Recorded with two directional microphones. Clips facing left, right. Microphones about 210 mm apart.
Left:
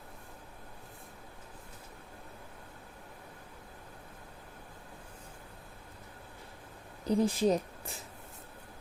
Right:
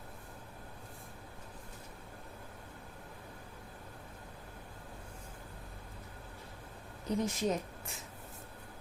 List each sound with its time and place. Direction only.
7.0 s speech: 35° left (ahead or behind)